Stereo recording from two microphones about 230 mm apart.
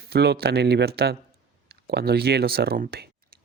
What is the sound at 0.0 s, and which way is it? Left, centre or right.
Speech, right.